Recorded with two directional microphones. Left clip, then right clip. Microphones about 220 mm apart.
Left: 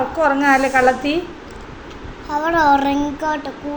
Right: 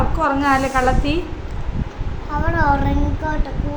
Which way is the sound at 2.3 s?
25° left (ahead or behind).